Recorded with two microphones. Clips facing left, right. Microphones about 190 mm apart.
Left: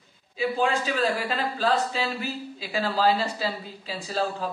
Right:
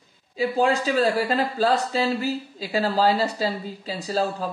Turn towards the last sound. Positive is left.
turn(degrees=-40)  # may be behind; listen again after turning